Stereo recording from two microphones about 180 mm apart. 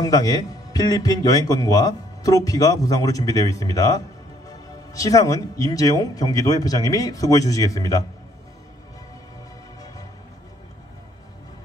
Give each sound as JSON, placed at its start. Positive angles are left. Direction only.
{"t": 0.0, "sound": "a man's voice", "side_deg": 20}